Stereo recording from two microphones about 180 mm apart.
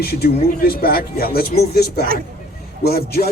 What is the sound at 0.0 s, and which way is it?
Speech, 60° left (ahead or behind).